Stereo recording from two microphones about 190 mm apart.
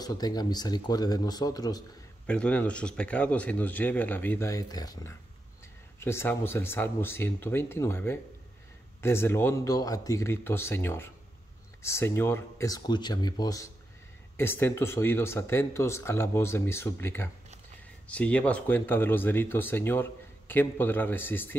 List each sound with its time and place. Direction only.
0.0 s speech: 20° left (ahead or behind)
2.2 s speech: 5° left (ahead or behind)